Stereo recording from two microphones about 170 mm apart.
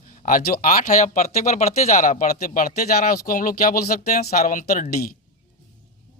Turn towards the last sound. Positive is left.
turn(degrees=60)  # may be behind; listen again after turning